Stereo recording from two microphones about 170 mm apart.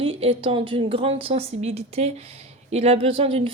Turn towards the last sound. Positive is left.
turn(degrees=-35)  # may be behind; listen again after turning